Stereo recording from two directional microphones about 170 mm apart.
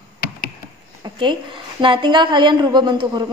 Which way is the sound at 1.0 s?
25° right (ahead or behind).